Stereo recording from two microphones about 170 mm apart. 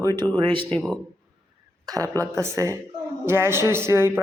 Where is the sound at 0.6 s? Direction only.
5° left (ahead or behind).